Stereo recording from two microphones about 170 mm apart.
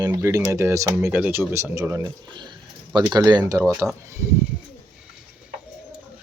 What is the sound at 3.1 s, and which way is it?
Speech, 25° right (ahead or behind).